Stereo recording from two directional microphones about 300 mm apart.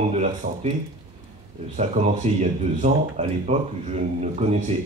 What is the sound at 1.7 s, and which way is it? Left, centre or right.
Speech, right.